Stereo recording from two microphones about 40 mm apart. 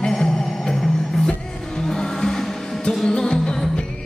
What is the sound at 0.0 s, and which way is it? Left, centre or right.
Music, centre.